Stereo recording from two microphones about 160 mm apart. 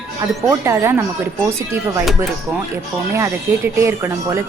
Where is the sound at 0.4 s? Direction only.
15° right (ahead or behind).